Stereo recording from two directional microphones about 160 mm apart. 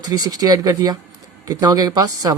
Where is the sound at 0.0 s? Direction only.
25° right (ahead or behind).